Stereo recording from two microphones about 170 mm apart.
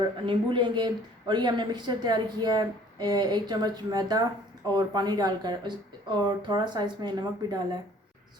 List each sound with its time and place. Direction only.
0.3 s speech: 25° right (ahead or behind)